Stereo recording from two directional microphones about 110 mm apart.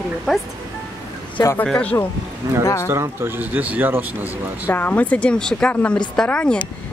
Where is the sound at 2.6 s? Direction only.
25° left (ahead or behind).